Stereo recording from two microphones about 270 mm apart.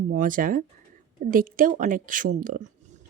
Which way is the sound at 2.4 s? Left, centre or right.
Right.